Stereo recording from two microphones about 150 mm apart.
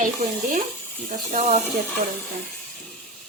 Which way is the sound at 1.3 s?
50° right (ahead or behind).